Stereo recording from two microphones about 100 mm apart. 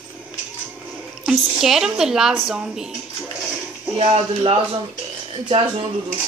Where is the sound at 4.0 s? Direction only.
80° right.